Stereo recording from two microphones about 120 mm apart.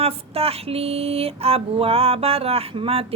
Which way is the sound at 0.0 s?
55° right (ahead or behind).